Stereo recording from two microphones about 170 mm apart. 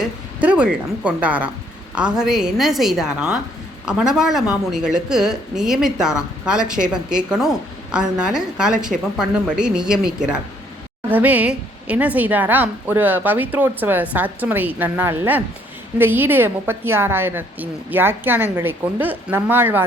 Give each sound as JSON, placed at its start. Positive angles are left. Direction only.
{"t": 0.4, "sound": "a woman's voice", "side_deg": -5}